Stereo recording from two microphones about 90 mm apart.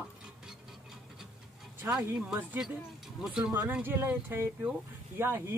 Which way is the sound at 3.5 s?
20° right (ahead or behind).